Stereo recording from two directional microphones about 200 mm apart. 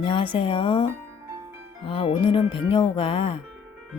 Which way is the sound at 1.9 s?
25° left (ahead or behind).